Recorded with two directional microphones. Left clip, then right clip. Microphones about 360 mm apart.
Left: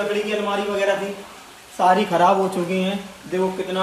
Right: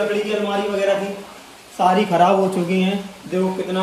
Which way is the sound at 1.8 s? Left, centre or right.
Centre.